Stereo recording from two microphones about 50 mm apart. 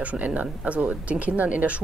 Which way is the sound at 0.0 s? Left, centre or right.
Right.